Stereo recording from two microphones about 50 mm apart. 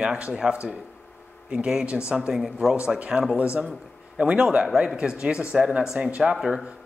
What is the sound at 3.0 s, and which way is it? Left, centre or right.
Speech, right.